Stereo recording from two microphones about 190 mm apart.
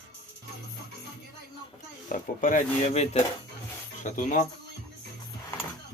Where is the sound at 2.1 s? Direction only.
45° left (ahead or behind).